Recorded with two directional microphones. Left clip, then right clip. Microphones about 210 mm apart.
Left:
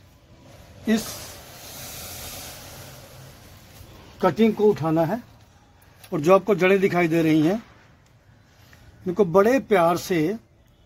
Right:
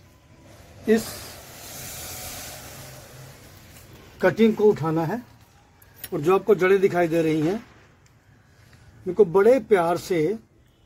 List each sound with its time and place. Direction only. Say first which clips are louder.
4.2 s speech: right 1 dB; 25° left (ahead or behind)
4.9 s speech: left 4 dB; 40° left (ahead or behind)
9.0 s speech: right 1 dB; 50° left (ahead or behind)